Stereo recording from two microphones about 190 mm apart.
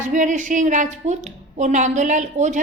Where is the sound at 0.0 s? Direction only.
40° right (ahead or behind).